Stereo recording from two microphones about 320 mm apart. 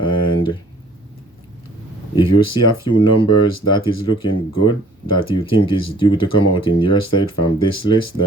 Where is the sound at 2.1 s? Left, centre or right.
Centre.